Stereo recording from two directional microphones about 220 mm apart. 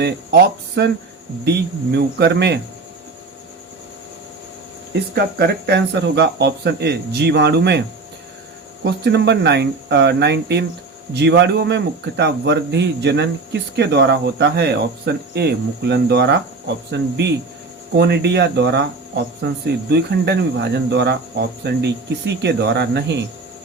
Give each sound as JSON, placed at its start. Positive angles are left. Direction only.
{"t": 0.0, "sound": "speech", "side_deg": -50}
{"t": 4.9, "sound": "speech", "side_deg": -50}